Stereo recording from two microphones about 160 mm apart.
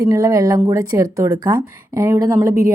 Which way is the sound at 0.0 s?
20° right (ahead or behind).